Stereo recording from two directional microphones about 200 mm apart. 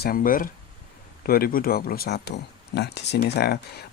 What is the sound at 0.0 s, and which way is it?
Speech, 45° left (ahead or behind).